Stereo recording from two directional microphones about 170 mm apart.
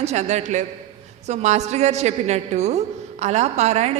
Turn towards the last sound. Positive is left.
turn(degrees=-40)  # may be behind; listen again after turning